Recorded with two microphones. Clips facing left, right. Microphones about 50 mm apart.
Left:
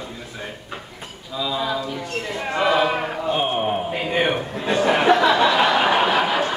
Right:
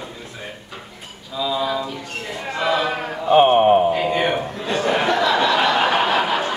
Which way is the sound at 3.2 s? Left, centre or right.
Right.